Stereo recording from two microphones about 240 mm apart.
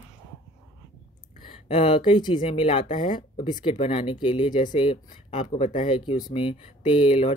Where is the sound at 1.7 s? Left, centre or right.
Left.